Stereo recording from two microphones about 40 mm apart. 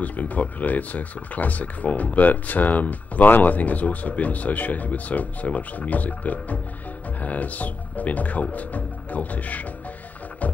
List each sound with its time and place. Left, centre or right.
0.0 s speech: left